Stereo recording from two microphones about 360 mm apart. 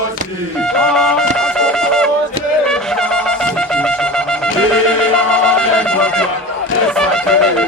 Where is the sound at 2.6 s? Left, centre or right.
Centre.